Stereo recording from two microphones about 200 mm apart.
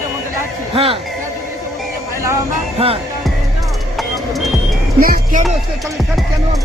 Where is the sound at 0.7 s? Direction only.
25° right (ahead or behind).